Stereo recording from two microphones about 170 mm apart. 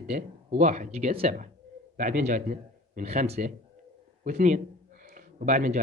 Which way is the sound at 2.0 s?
50° right (ahead or behind).